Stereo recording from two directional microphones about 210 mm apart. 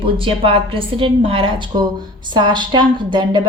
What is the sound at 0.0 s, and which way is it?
A woman's voice, 25° right (ahead or behind).